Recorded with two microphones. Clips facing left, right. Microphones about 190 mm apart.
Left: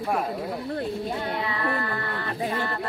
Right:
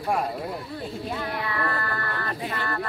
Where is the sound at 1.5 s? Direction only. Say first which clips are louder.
Left 1 dB; 15° left (ahead or behind).